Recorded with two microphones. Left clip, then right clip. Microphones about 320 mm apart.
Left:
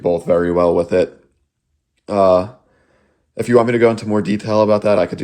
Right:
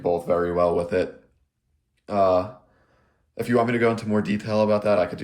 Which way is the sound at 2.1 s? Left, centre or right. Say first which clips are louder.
Left 7 dB; centre.